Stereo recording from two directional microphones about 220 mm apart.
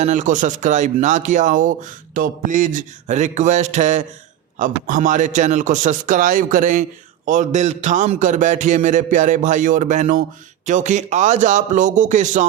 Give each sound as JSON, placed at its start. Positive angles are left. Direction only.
{"t": 0.0, "sound": "speech", "side_deg": -35}